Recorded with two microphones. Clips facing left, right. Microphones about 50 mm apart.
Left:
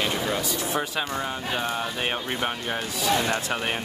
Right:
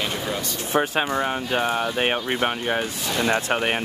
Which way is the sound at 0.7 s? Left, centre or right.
Right.